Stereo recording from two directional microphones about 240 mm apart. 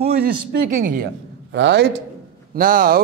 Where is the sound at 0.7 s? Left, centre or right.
Right.